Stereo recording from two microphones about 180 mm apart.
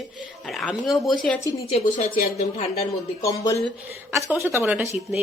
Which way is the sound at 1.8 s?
45° left (ahead or behind).